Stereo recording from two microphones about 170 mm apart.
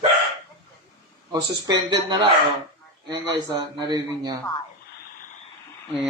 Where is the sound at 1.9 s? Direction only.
25° right (ahead or behind).